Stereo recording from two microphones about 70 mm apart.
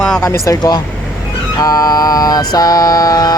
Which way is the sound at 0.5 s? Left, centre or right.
Left.